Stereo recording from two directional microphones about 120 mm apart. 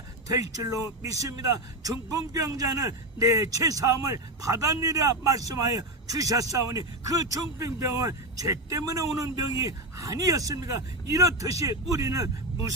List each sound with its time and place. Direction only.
0.3 s a man's voice: 30° right (ahead or behind)